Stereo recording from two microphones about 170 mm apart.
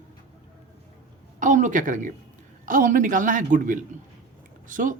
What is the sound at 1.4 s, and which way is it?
A woman's voice, 50° right (ahead or behind).